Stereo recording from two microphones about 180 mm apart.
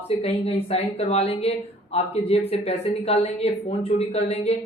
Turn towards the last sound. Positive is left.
turn(degrees=35)  # may be behind; listen again after turning